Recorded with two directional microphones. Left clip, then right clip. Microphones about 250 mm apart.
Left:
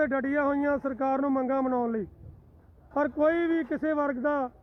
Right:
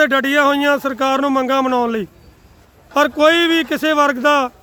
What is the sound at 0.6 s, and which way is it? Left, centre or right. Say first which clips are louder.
Speech: right 12 dB; centre.